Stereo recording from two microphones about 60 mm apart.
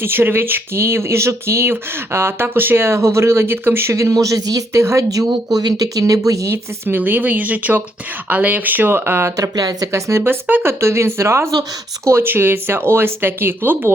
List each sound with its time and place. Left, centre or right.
0.0 s speech: right
3.9 s speech: right
4.8 s speech: right
6.5 s speech: right
9.4 s speech: right
9.9 s speech: right
10.2 s speech: right
10.7 s speech: right